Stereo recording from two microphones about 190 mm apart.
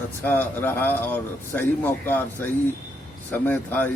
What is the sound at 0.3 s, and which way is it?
A man's voice, 10° left (ahead or behind).